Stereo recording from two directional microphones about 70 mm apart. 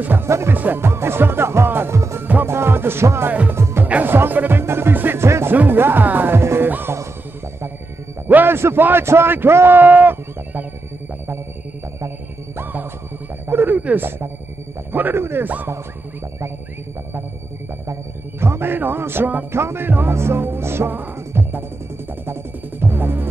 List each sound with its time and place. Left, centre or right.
0.0 s a man's voice: right
0.3 s music: right
0.6 s music: right
2.0 s music: right
3.8 s music: right
8.3 s music: right
8.5 s a man's voice: right
13.5 s a sound: right
13.7 s a man's voice: centre
18.4 s music: right